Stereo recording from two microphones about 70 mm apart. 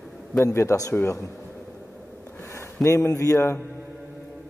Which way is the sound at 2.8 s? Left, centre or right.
Left.